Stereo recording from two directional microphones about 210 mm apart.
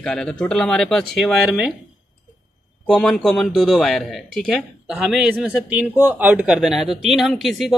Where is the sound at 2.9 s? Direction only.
5° left (ahead or behind).